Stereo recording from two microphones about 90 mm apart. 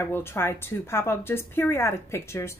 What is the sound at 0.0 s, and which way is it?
A woman's voice, 25° left (ahead or behind).